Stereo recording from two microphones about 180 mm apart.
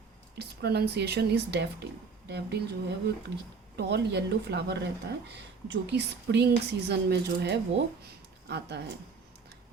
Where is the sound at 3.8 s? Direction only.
70° right (ahead or behind).